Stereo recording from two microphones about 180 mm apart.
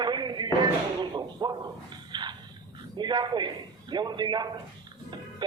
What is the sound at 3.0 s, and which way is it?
A man's voice, 25° right (ahead or behind).